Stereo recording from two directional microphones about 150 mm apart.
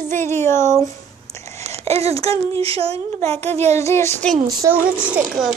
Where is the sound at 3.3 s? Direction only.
45° right (ahead or behind).